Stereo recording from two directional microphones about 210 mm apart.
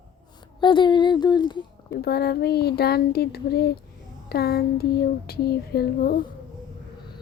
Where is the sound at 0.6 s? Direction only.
20° left (ahead or behind).